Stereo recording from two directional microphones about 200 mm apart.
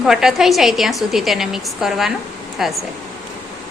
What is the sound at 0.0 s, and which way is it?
A woman's voice, centre (ahead or behind).